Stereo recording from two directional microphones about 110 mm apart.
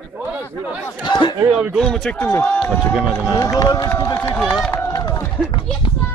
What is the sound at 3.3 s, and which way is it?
Speech, 30° left (ahead or behind).